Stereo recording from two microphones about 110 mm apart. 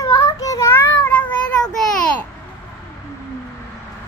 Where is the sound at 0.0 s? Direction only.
30° left (ahead or behind); by 1.7 s 15° left (ahead or behind).